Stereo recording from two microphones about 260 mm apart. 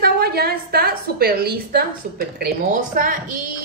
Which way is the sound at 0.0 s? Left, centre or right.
Right.